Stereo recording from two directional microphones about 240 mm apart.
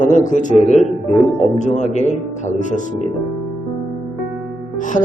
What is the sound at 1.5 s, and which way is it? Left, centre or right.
A man's voice, left.